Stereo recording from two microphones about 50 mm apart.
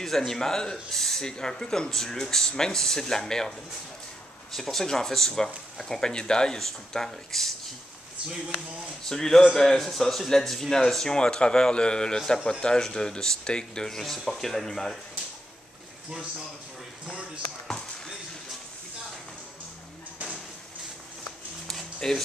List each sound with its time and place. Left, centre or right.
0.0 s speech: centre
8.3 s speech: centre
9.1 s speech: centre
17.0 s speech: centre
17.6 s basketball bounce: centre
21.6 s a sound: centre